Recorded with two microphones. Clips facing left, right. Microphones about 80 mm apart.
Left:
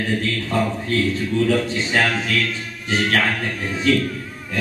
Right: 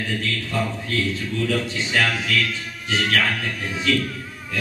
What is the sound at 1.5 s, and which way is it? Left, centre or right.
A man's voice, left.